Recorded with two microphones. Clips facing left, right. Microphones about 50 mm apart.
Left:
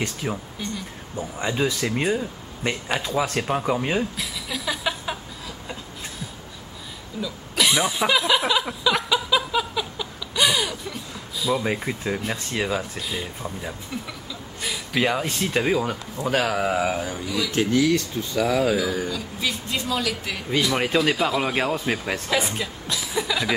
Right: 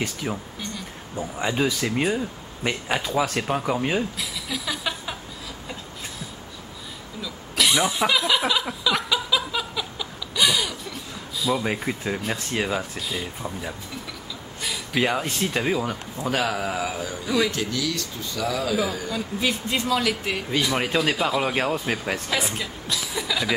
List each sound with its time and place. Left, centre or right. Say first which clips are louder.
0.2 s speech: left 1 dB; centre
3.4 s a sound: left 1 dB; centre
7.2 s a sound: left 1 dB; centre
12.1 s speech: left 1 dB; centre
14.6 s a sound: left 1 dB; centre
15.5 s a man's voice: left 4 dB; centre
16.6 s mantra: left 4 dB; left
17.5 s speech: left 7 dB; left
19.0 s speech: right 2 dB; right
20.6 s speech: left 2 dB; centre
22.3 s chuckle: left 2 dB; centre